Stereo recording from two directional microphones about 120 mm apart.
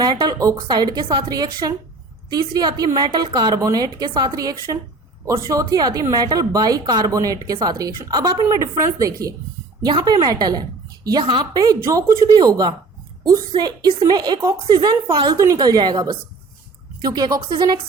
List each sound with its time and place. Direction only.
0.0 s a sound: 35° right (ahead or behind)
0.5 s a woman's voice: 40° right (ahead or behind)
15.4 s a woman's voice: 30° right (ahead or behind)